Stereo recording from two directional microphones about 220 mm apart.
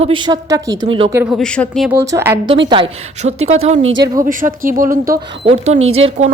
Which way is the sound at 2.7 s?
25° right (ahead or behind).